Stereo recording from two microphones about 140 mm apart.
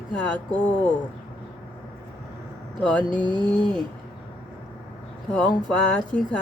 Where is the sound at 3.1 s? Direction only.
35° right (ahead or behind).